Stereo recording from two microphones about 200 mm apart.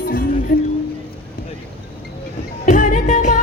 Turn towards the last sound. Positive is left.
turn(degrees=40)  # may be behind; listen again after turning